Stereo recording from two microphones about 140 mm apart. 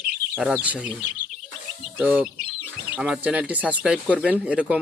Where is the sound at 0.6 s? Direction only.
10° right (ahead or behind).